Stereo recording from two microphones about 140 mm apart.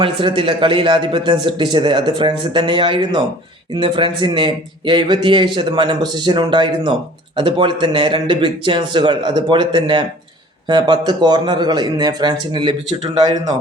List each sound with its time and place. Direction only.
0.0 s a man's voice: 35° right (ahead or behind)